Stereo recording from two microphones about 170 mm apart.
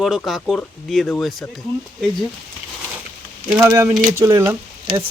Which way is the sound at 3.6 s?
15° right (ahead or behind).